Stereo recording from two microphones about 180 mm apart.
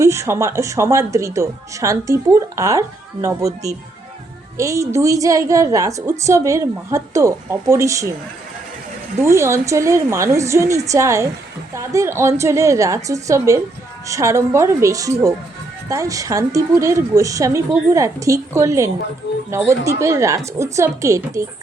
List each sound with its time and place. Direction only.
0.0 s a woman's voice: 15° right (ahead or behind)
9.2 s a woman's voice: 15° right (ahead or behind)